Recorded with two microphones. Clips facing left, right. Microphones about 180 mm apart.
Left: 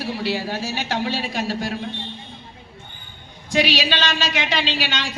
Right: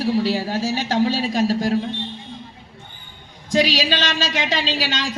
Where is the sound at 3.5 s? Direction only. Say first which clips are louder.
Right 2 dB; 40° right (ahead or behind).